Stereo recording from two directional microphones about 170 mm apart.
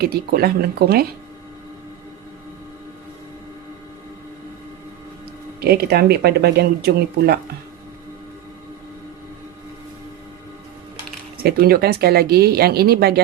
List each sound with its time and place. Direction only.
0.0 s speech: 65° right (ahead or behind)
5.5 s speech: 70° right (ahead or behind)
11.4 s speech: 65° right (ahead or behind)